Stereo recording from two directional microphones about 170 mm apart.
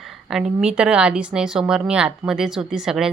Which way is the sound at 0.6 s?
5° right (ahead or behind).